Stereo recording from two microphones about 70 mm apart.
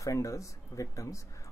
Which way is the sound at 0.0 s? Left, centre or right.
Left.